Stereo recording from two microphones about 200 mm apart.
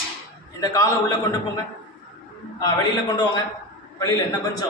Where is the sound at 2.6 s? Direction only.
20° left (ahead or behind).